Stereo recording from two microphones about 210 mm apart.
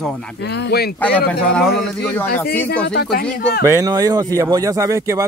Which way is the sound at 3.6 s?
15° right (ahead or behind).